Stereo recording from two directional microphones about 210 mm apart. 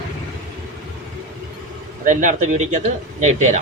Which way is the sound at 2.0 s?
35° right (ahead or behind).